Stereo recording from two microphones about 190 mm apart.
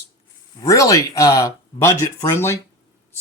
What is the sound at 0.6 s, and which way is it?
Speech, 15° left (ahead or behind).